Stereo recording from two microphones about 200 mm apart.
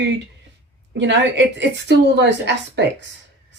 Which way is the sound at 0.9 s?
60° right (ahead or behind).